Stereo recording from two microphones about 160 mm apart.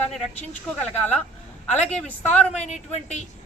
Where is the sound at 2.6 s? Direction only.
45° left (ahead or behind).